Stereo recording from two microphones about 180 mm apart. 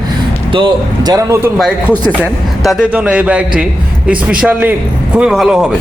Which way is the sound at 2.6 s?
Centre (ahead or behind).